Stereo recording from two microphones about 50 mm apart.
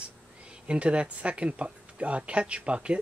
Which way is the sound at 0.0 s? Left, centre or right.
Right.